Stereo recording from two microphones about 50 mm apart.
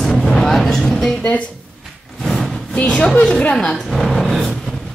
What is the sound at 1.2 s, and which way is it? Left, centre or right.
Speech, left.